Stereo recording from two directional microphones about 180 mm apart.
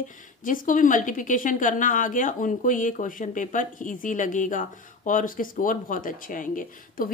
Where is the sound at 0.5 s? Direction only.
45° left (ahead or behind).